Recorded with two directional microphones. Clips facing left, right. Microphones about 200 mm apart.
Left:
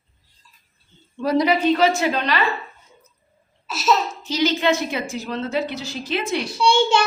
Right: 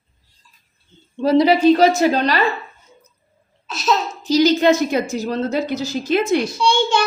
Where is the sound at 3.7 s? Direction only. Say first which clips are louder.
Even; 5° left (ahead or behind).